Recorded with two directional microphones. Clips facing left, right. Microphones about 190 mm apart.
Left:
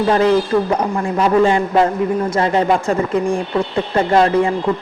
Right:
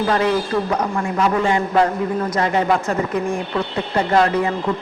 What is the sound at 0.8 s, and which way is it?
A man's voice, 30° left (ahead or behind).